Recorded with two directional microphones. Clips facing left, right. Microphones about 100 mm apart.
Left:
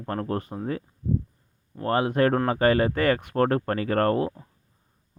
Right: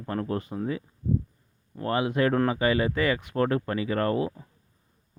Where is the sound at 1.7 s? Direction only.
40° left (ahead or behind).